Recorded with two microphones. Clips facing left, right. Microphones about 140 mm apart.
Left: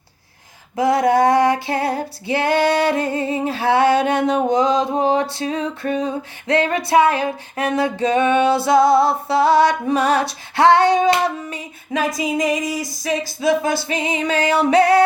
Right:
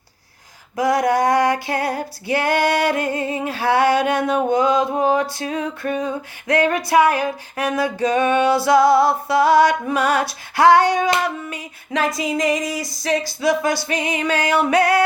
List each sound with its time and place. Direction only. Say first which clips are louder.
0.8 s music: left 2 dB; 25° left (ahead or behind)
11.9 s a sound: left 1 dB; 20° left (ahead or behind)
13.4 s music: left 3 dB; 25° left (ahead or behind)